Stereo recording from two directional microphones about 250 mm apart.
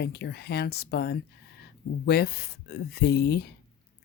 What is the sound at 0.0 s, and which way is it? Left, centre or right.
Speech, left.